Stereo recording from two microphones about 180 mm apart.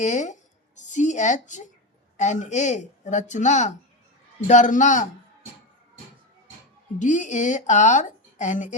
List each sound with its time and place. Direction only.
0.0 s a woman's voice: 40° left (ahead or behind)
7.0 s a woman's voice: 45° left (ahead or behind)